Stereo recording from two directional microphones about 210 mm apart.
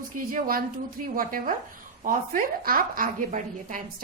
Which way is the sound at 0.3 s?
45° right (ahead or behind).